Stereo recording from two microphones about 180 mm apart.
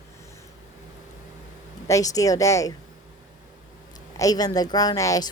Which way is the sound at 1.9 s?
20° left (ahead or behind).